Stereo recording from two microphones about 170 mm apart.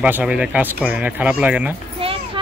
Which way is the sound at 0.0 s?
5° right (ahead or behind).